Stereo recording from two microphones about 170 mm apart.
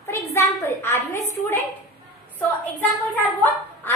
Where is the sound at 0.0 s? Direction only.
15° left (ahead or behind).